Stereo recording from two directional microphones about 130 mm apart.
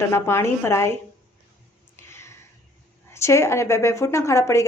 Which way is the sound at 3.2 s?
20° left (ahead or behind).